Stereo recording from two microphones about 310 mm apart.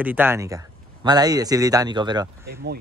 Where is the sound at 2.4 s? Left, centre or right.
Right.